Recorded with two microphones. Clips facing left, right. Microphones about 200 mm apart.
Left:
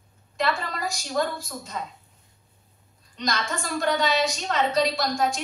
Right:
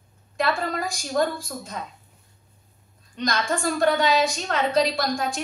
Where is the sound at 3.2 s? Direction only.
55° right (ahead or behind).